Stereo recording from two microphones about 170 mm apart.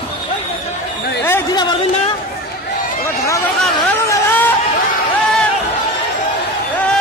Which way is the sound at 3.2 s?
20° left (ahead or behind).